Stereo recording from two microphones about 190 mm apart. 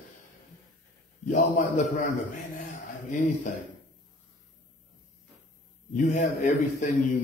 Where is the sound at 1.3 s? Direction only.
40° left (ahead or behind).